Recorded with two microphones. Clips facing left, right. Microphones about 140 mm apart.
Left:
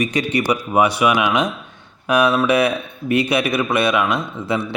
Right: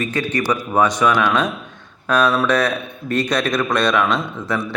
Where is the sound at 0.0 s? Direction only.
15° left (ahead or behind).